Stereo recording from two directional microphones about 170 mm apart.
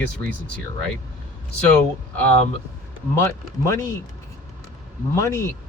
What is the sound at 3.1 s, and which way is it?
Speech, 15° left (ahead or behind).